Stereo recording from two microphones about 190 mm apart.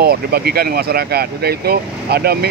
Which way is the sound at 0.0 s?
55° right (ahead or behind).